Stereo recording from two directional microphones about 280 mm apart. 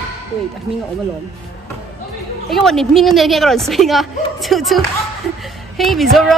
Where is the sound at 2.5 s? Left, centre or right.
Centre.